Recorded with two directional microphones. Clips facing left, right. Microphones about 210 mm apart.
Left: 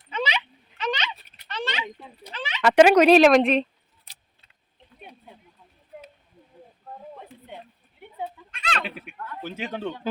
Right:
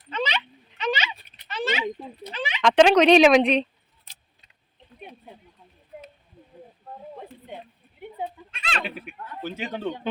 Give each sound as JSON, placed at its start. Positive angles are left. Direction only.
{"t": 0.1, "sound": "a sound", "side_deg": 10}
{"t": 0.9, "sound": "a sound", "side_deg": -5}
{"t": 2.6, "sound": "speech", "side_deg": 5}
{"t": 8.6, "sound": "speech", "side_deg": 0}
{"t": 9.1, "sound": "speech", "side_deg": -20}
{"t": 9.4, "sound": "speech", "side_deg": 0}